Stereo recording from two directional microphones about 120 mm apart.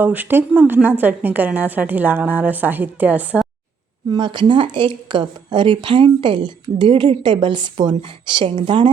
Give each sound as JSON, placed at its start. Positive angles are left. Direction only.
{"t": 0.0, "sound": "a woman's voice", "side_deg": -15}
{"t": 4.1, "sound": "speech", "side_deg": -40}